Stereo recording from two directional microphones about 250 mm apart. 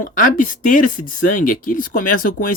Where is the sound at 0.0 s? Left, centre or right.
Left.